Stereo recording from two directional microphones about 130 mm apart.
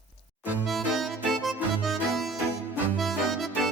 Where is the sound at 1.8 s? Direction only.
Centre (ahead or behind).